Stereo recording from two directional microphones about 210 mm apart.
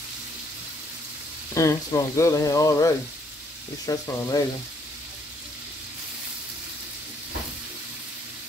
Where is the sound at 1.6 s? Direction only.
15° left (ahead or behind).